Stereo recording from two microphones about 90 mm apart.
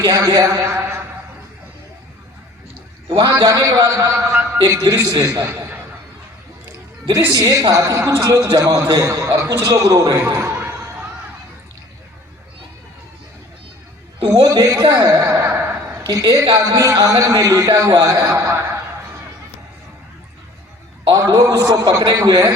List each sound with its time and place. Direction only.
0.0 s a man's voice: 45° right (ahead or behind)
3.2 s a man's voice: 50° right (ahead or behind)
4.1 s a man's voice: 30° right (ahead or behind)
4.5 s a man's voice: 45° right (ahead or behind)
7.3 s a man's voice: 40° right (ahead or behind)
10.5 s a sound: 25° right (ahead or behind)
14.3 s a man's voice: 45° right (ahead or behind); by 16.0 s 25° right (ahead or behind)
16.0 s a man's voice: 40° right (ahead or behind)
21.1 s a man's voice: 40° right (ahead or behind)